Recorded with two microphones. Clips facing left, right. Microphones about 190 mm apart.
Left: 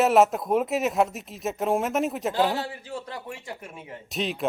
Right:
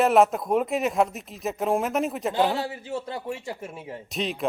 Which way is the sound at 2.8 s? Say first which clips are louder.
Right 4 dB; 25° right (ahead or behind).